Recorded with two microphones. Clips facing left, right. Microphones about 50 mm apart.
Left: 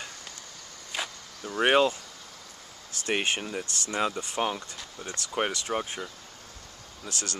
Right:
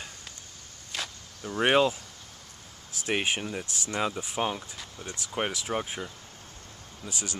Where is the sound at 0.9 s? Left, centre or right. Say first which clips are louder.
Left 2 dB; centre.